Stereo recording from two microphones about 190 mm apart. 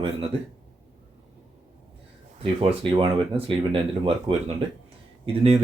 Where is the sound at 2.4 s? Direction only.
30° right (ahead or behind).